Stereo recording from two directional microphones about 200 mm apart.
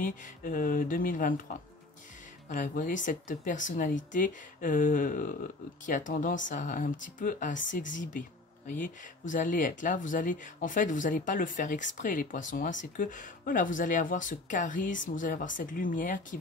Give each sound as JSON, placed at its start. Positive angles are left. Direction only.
{"t": 0.0, "sound": "speech", "side_deg": 40}
{"t": 2.5, "sound": "speech", "side_deg": 40}